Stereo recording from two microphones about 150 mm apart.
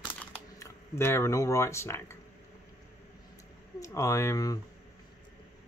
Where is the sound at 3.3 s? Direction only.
20° left (ahead or behind).